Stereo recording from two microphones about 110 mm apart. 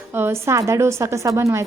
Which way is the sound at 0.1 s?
20° right (ahead or behind).